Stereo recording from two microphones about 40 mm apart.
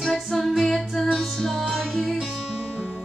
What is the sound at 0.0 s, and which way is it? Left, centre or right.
Music, centre.